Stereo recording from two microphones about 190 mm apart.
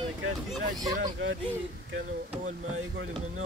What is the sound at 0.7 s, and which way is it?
Speech, 20° right (ahead or behind).